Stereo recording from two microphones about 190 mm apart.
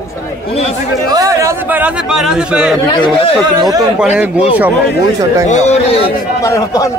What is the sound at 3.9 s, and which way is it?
Speech, 5° right (ahead or behind).